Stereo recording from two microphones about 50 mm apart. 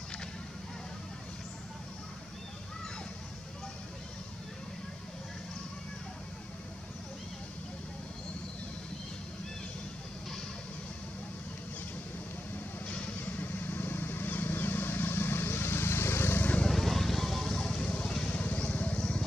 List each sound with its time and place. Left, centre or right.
12.8 s vehicle: left
16.6 s vehicle: centre
17.7 s vehicle: left